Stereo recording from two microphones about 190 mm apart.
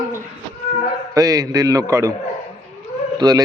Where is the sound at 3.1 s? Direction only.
20° right (ahead or behind).